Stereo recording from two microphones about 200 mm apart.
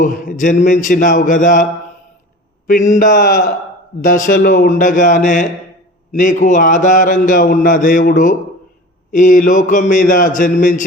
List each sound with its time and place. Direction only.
0.0 s a man's voice: 40° left (ahead or behind)
2.6 s a man's voice: 40° left (ahead or behind)